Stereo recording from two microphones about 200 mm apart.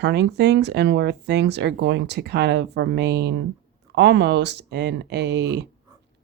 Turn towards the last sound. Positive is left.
turn(degrees=-55)  # may be behind; listen again after turning